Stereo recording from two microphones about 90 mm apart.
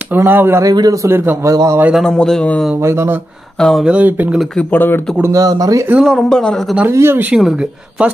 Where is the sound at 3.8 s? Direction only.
15° right (ahead or behind).